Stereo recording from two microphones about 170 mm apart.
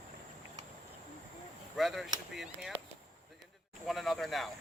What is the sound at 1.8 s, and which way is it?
Speech, centre (ahead or behind).